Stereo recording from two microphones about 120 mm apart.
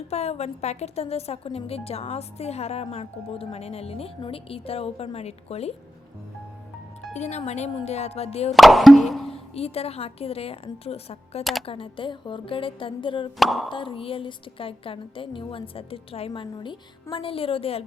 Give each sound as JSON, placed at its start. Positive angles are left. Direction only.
{"t": 0.1, "sound": "a woman's voice", "side_deg": 65}
{"t": 7.1, "sound": "a woman's voice", "side_deg": 70}
{"t": 8.5, "sound": "plop", "side_deg": 0}
{"t": 9.3, "sound": "a woman's voice", "side_deg": 55}
{"t": 13.4, "sound": "plop", "side_deg": 0}
{"t": 13.7, "sound": "a woman's voice", "side_deg": 45}